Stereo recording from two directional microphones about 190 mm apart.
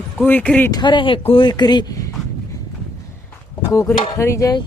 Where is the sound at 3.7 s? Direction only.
15° left (ahead or behind).